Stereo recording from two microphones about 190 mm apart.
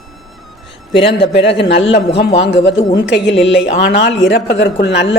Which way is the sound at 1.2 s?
65° left (ahead or behind).